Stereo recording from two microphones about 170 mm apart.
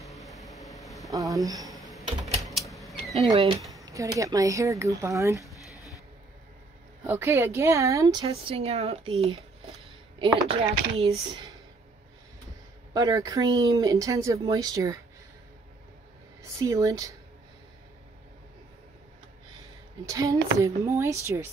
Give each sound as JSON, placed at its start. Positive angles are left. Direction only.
{"t": 0.1, "sound": "vehicle", "side_deg": 0}
{"t": 0.8, "sound": "a sound", "side_deg": 0}
{"t": 1.1, "sound": "speech", "side_deg": -20}
{"t": 1.7, "sound": "computer keyboard", "side_deg": 0}
{"t": 2.7, "sound": "creak", "side_deg": 0}
{"t": 3.7, "sound": "a woman's voice", "side_deg": -20}
{"t": 7.1, "sound": "a woman's voice", "side_deg": -15}
{"t": 12.9, "sound": "a woman's voice", "side_deg": -20}
{"t": 16.6, "sound": "a woman's voice", "side_deg": -20}
{"t": 20.1, "sound": "a woman's voice", "side_deg": -20}